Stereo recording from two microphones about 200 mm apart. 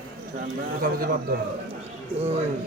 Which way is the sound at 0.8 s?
45° right (ahead or behind).